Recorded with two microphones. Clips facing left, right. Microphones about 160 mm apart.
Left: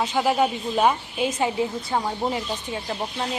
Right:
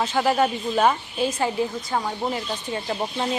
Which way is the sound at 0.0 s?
10° left (ahead or behind).